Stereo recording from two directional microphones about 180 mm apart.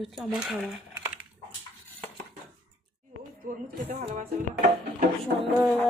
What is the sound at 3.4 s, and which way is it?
Speech, 50° right (ahead or behind).